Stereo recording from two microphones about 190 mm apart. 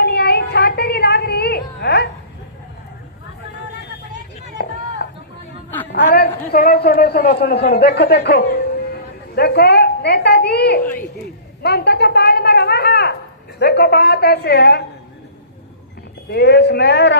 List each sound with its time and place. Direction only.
0.0 s a sound: 60° left (ahead or behind)
4.6 s run: 55° left (ahead or behind)
6.5 s a man's voice: 50° left (ahead or behind)
11.6 s a sound: 60° left (ahead or behind)
13.6 s a man's voice: 60° left (ahead or behind)
16.3 s a man's voice: 60° left (ahead or behind)